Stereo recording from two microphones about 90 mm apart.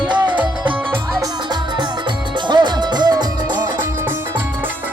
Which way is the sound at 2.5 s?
55° right (ahead or behind).